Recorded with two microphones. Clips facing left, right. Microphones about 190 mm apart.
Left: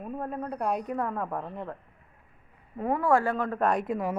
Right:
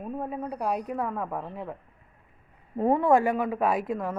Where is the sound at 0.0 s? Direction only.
5° right (ahead or behind).